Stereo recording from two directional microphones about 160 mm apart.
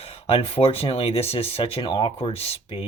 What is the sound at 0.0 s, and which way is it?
Speech, 35° left (ahead or behind).